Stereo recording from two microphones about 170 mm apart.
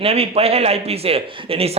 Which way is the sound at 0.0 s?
35° right (ahead or behind).